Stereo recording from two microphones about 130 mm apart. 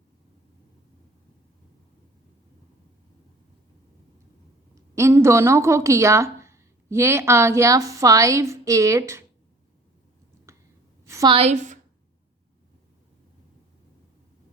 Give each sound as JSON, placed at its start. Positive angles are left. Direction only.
{"t": 4.7, "sound": "a woman's voice", "side_deg": -20}
{"t": 10.5, "sound": "a sound", "side_deg": -20}
{"t": 11.3, "sound": "a woman's voice", "side_deg": -55}